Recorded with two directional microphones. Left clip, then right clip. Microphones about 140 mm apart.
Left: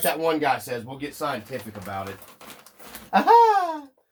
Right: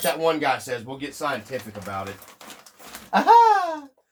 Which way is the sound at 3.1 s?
25° right (ahead or behind).